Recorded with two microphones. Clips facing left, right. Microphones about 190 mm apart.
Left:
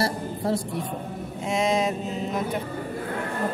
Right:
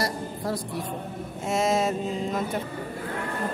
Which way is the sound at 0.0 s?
25° left (ahead or behind).